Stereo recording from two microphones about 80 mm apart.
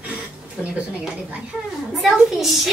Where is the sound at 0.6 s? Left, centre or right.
Centre.